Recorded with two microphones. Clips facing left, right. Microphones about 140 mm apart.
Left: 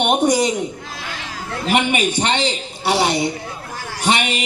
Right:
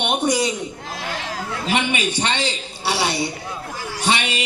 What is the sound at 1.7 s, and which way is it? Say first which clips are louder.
Speech: left 4 dB; 50° left (ahead or behind).